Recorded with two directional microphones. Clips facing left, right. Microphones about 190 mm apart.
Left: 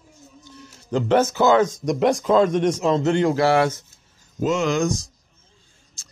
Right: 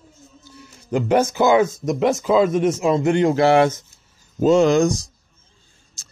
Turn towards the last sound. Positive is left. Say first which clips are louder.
# right 6 dB
turn(degrees=-35)  # may be behind; listen again after turning